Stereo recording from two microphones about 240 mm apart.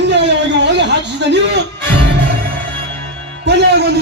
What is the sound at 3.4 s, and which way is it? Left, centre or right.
Music, right.